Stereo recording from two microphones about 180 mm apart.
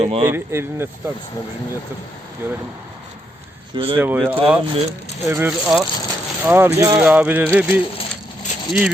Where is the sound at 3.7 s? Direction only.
30° right (ahead or behind).